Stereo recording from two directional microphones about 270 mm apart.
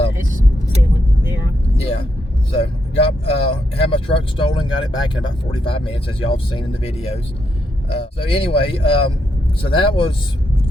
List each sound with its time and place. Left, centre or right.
2.5 s speech: centre